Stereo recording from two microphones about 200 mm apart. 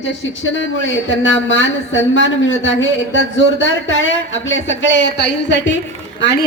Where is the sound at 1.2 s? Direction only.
70° left (ahead or behind).